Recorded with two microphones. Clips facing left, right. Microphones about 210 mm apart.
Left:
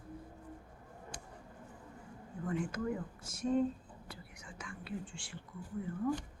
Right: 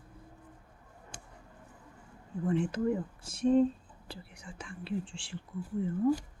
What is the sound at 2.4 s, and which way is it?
Speech, 30° right (ahead or behind).